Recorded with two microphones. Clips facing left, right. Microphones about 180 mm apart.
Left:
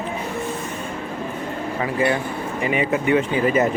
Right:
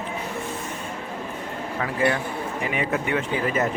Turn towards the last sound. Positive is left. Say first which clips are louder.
# left 5 dB
turn(degrees=10)  # may be behind; listen again after turning